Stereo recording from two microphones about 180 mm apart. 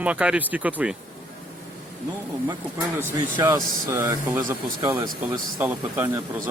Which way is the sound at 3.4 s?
15° right (ahead or behind).